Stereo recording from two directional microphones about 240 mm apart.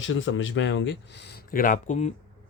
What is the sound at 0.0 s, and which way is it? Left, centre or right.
Speech, left.